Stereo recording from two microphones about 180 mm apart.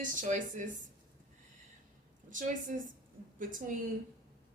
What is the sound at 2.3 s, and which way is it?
Speech, 45° right (ahead or behind).